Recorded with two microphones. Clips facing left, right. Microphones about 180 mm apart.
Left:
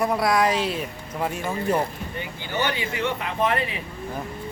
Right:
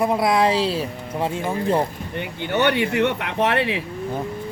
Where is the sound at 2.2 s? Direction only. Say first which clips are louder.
Right 6 dB; 65° right (ahead or behind); by 3.8 s 85° right.